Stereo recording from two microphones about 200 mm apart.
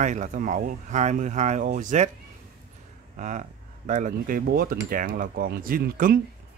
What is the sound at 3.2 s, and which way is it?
Speech, 40° right (ahead or behind).